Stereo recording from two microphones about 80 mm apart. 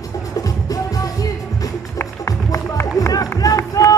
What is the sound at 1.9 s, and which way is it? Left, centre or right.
Run, left.